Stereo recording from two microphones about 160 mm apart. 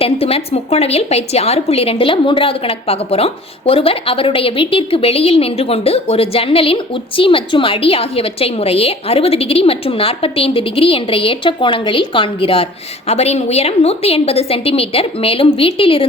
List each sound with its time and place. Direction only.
0.0 s a woman's voice: 40° left (ahead or behind)